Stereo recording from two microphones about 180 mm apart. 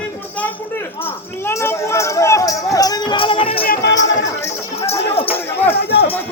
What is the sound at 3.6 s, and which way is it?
Speech, 60° left (ahead or behind).